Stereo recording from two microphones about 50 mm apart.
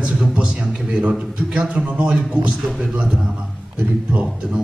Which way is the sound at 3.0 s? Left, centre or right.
Centre.